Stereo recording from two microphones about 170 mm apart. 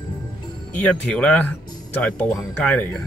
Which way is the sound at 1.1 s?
5° left (ahead or behind).